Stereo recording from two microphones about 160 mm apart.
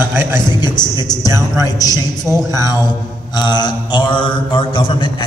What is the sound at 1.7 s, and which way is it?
Speech, 25° left (ahead or behind).